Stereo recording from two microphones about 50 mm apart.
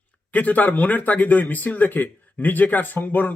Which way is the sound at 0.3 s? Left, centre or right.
Left.